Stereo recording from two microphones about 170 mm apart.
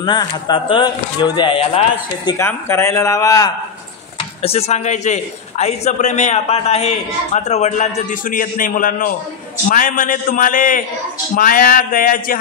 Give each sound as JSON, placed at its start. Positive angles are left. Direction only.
{"t": 0.0, "sound": "speech", "side_deg": 25}
{"t": 2.2, "sound": "speech", "side_deg": 15}
{"t": 4.4, "sound": "a man's voice", "side_deg": 35}
{"t": 11.3, "sound": "a sound", "side_deg": 55}